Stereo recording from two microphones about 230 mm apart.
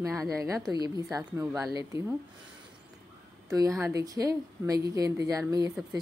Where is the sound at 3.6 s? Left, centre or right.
Centre.